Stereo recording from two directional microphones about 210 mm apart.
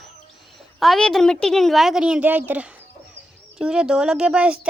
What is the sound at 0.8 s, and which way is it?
A woman's voice, centre (ahead or behind).